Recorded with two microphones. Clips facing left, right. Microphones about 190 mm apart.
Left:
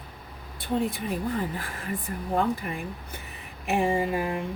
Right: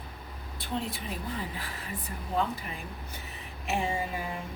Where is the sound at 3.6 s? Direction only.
55° left (ahead or behind).